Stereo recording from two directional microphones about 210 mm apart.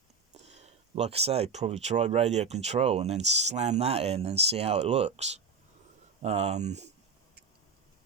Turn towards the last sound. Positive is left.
turn(degrees=-30)  # may be behind; listen again after turning